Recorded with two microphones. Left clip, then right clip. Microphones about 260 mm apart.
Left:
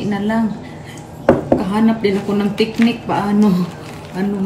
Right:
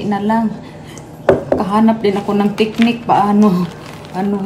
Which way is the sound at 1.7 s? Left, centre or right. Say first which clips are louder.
Right 3 dB; right.